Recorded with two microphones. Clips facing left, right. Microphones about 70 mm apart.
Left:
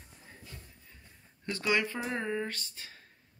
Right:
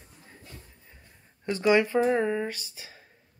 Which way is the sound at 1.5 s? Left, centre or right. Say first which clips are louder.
Right 8 dB; right.